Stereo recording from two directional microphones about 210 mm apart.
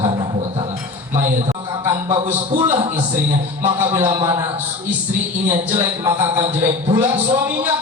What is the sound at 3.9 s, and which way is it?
Speech, 20° right (ahead or behind).